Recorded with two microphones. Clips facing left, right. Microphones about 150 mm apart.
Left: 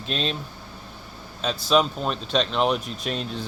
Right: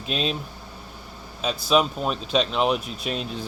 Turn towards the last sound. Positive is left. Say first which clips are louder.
# even
turn(degrees=-5)  # may be behind; listen again after turning